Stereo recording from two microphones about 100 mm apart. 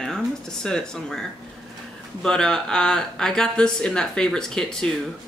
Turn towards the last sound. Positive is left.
turn(degrees=5)  # may be behind; listen again after turning